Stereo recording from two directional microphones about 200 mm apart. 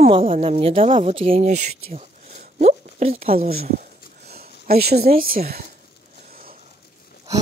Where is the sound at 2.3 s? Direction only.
30° right (ahead or behind).